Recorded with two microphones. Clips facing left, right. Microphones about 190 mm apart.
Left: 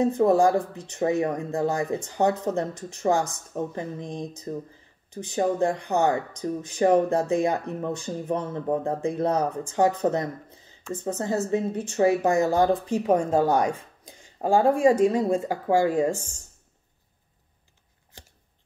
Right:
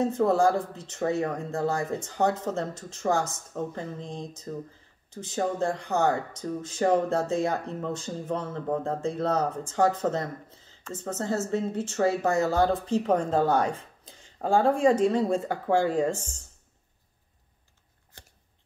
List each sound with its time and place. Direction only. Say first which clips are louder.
0.0 s speech: left 3 dB; 15° left (ahead or behind)